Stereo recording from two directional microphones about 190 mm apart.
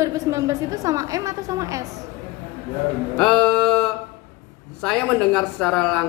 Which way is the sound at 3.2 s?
5° left (ahead or behind).